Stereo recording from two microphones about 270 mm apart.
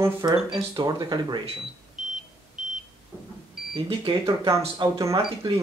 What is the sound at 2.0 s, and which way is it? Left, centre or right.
Vehicle, centre.